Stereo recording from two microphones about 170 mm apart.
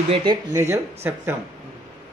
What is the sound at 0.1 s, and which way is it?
Speech, 25° right (ahead or behind).